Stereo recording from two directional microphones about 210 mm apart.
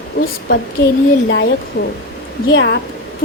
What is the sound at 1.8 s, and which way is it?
A woman's voice, 50° left (ahead or behind).